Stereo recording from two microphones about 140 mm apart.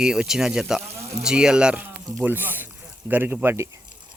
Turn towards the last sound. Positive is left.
turn(degrees=-20)  # may be behind; listen again after turning